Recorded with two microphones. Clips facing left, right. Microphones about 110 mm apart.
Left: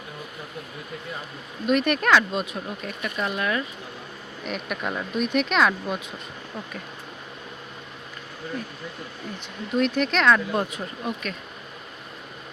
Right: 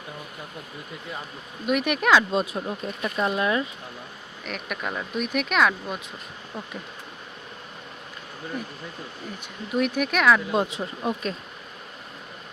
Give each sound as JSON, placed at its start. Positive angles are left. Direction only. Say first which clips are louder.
{"t": 1.6, "sound": "speech", "louder": "left 1 dB", "side_deg": -10}
{"t": 2.3, "sound": "speech", "louder": "right 3 dB", "side_deg": -30}
{"t": 4.4, "sound": "speech", "louder": "left 2 dB", "side_deg": 0}
{"t": 9.7, "sound": "speech", "louder": "left 1 dB", "side_deg": -5}
{"t": 10.5, "sound": "speech", "louder": "right 2 dB", "side_deg": -25}